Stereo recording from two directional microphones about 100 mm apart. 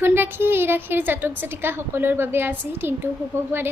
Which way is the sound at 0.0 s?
20° right (ahead or behind).